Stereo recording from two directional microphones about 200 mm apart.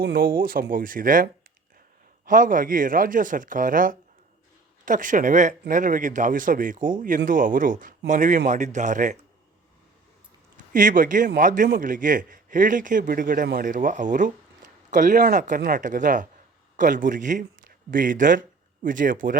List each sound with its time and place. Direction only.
0.0 s a man's voice: 50° right (ahead or behind)
10.7 s a man's voice: 40° right (ahead or behind)